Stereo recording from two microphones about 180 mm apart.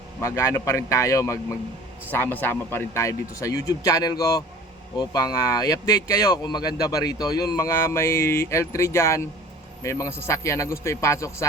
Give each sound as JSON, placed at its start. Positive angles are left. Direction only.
{"t": 0.2, "sound": "speech", "side_deg": 15}